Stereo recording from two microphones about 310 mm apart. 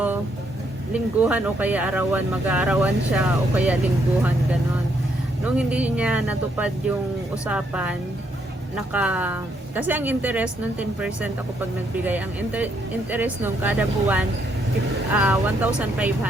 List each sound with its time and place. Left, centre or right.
0.9 s speech: centre
5.5 s speech: centre